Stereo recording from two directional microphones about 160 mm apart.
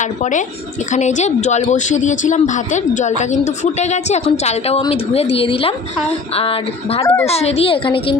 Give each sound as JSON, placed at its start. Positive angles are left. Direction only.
{"t": 0.0, "sound": "a woman's voice", "side_deg": 50}
{"t": 7.0, "sound": "a child's voice", "side_deg": 15}
{"t": 7.3, "sound": "a woman's voice", "side_deg": 40}